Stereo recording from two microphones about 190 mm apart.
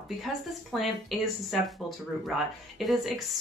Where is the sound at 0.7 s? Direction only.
Centre (ahead or behind).